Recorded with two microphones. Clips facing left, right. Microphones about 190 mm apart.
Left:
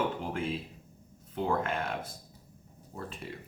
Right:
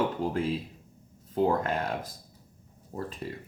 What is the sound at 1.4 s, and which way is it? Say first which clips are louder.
Speech: right 2 dB; 40° right (ahead or behind).